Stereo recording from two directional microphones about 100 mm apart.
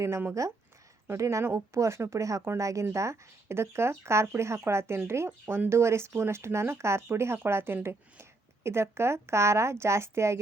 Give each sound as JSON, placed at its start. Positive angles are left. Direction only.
{"t": 0.0, "sound": "speech", "side_deg": -25}